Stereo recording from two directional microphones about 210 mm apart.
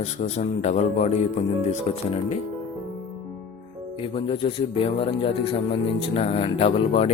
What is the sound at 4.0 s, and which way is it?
Speech, 25° left (ahead or behind).